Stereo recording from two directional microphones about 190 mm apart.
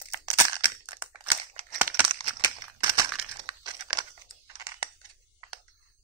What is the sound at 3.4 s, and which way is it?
Crumpling, 25° right (ahead or behind).